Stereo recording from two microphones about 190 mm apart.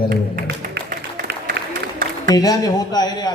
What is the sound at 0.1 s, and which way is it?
Music, 55° right (ahead or behind).